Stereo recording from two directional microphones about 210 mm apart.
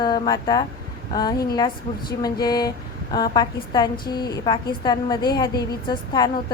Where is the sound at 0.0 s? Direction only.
20° left (ahead or behind).